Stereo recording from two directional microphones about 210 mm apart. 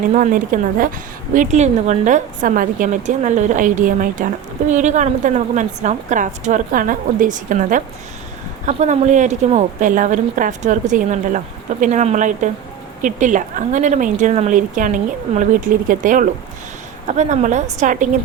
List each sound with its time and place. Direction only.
0.1 s a woman's voice: 40° right (ahead or behind)